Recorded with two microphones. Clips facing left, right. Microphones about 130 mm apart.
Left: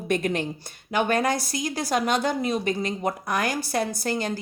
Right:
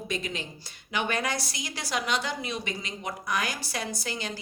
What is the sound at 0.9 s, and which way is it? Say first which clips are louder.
A woman's voice: left 7 dB; 45° left (ahead or behind).